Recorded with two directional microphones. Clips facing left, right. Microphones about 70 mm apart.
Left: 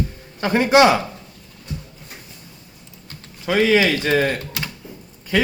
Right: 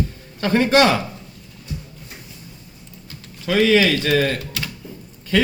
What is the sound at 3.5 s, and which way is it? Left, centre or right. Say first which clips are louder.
A man's voice: even; left.